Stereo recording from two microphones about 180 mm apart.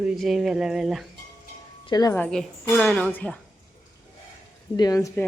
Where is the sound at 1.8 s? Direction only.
25° left (ahead or behind).